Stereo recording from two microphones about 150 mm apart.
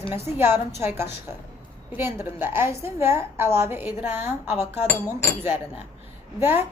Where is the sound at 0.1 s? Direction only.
15° right (ahead or behind).